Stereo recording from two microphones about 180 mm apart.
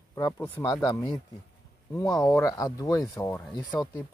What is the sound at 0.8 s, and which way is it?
Speech, 20° left (ahead or behind).